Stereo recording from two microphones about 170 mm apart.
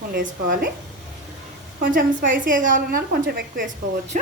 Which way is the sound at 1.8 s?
55° right (ahead or behind).